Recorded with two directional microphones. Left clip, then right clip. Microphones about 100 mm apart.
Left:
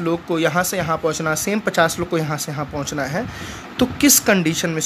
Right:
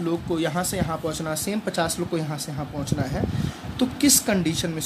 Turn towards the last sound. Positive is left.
turn(degrees=70)  # may be behind; listen again after turning